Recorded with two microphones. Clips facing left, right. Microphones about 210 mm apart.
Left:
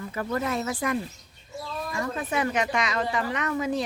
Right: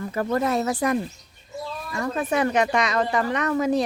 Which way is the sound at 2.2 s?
45° right (ahead or behind).